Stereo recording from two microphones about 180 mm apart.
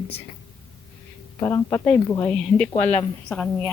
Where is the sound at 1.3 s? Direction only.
20° left (ahead or behind).